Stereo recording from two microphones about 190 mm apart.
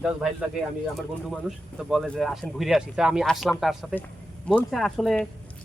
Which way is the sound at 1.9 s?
Centre (ahead or behind).